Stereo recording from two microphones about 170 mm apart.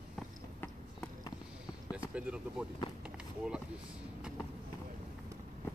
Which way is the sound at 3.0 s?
5° right (ahead or behind).